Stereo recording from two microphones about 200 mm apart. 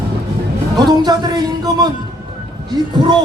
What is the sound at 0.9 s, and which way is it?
Speech, 20° right (ahead or behind).